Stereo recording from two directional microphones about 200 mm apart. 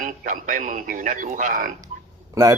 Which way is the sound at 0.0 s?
40° right (ahead or behind).